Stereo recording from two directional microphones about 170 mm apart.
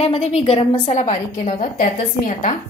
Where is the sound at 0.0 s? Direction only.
40° left (ahead or behind).